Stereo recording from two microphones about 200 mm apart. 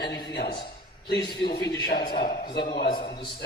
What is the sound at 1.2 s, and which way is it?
Speech, 20° left (ahead or behind).